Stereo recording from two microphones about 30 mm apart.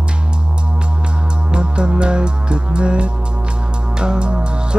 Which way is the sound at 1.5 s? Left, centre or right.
Right.